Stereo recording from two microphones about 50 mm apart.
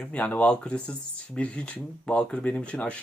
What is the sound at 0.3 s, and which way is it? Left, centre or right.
Speech, left.